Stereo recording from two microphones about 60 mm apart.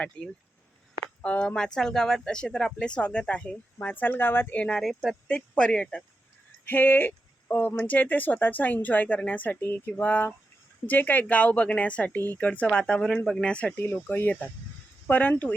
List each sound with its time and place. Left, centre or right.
0.2 s speech: centre; by 4.5 s left
4.5 s speech: centre
4.8 s speech: centre
5.3 s speech: centre
6.7 s speech: left; by 13.8 s centre
14.2 s speech: left